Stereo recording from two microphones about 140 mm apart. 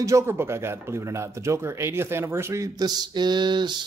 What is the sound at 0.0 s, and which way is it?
Speech, 20° right (ahead or behind).